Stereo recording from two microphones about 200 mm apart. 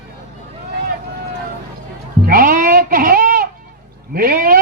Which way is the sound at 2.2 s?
45° right (ahead or behind).